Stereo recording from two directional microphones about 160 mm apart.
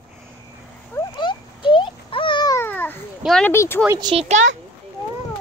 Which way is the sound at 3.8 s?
20° right (ahead or behind).